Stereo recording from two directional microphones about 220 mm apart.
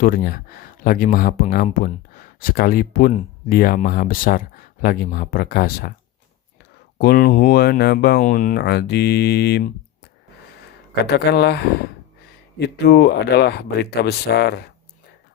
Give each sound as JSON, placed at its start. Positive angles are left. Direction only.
{"t": 0.0, "sound": "speech", "side_deg": 40}
{"t": 7.0, "sound": "speech", "side_deg": 45}